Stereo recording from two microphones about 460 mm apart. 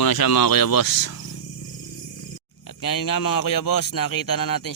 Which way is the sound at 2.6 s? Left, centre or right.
Left.